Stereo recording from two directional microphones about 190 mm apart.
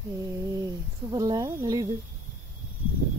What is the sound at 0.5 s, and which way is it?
Speech, 20° right (ahead or behind).